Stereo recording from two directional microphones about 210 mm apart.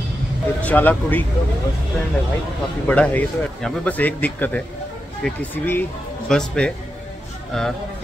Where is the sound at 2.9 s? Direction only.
5° left (ahead or behind).